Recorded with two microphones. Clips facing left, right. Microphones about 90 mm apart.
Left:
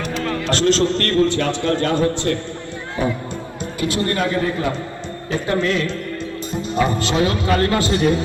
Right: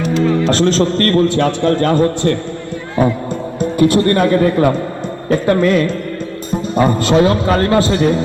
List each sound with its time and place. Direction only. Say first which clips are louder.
0.0 s music: right 9 dB; 15° right (ahead or behind)
0.5 s a man's voice: right 3 dB; 40° right (ahead or behind)